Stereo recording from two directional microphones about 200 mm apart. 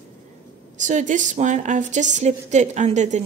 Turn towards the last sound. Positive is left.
turn(degrees=-35)  # may be behind; listen again after turning